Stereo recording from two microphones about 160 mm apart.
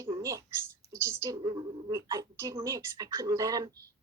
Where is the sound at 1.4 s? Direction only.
30° right (ahead or behind).